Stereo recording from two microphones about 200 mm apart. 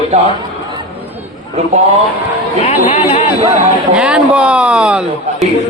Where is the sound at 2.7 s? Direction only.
30° left (ahead or behind).